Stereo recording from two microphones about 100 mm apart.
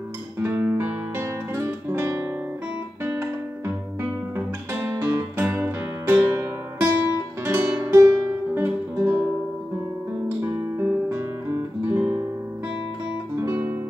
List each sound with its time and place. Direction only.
0.4 s guitar: 20° right (ahead or behind)
4.4 s music: 20° right (ahead or behind)
10.2 s music: 30° right (ahead or behind)
10.9 s guitar: 20° right (ahead or behind)
13.4 s guitar: 20° right (ahead or behind)